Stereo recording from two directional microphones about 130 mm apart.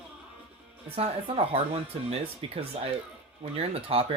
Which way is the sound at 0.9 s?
50° right (ahead or behind).